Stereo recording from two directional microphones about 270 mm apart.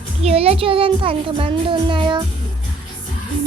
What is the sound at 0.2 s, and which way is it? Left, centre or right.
A child's voice, right.